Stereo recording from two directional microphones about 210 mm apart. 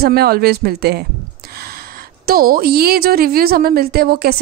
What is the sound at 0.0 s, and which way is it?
Speech, 45° right (ahead or behind).